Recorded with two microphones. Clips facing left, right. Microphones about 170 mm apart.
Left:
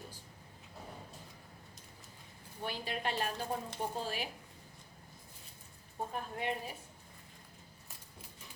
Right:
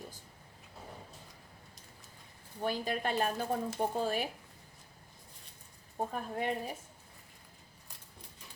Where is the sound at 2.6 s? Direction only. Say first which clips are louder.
Right 5 dB; 45° right (ahead or behind).